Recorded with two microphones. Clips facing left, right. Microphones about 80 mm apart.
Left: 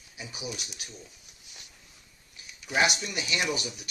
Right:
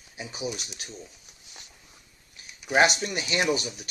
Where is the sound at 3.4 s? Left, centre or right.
Right.